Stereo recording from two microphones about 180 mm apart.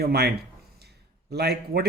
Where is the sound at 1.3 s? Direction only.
60° right (ahead or behind).